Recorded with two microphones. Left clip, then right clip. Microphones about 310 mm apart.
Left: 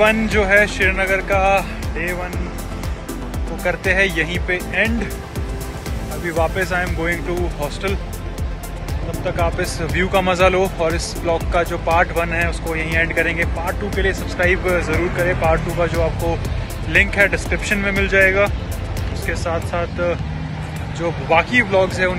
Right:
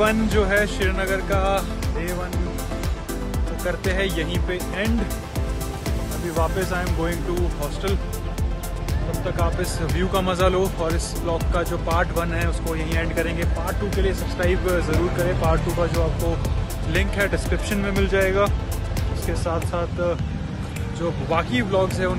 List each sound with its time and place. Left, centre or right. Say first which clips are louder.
0.0 s speech: left 5 dB; centre
3.6 s speech: left 8 dB; centre
6.3 s speech: left 5 dB; centre
9.4 s speech: left 6 dB; centre
21.3 s speech: left 9 dB; centre